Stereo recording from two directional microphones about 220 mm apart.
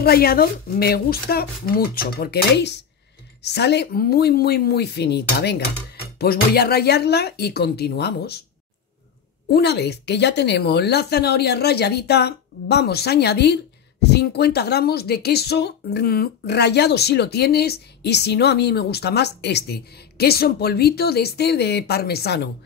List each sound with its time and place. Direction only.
0.0 s speech: 45° left (ahead or behind)
9.5 s speech: 50° left (ahead or behind)